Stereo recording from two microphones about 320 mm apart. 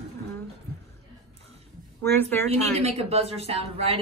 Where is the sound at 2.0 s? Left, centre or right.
Centre.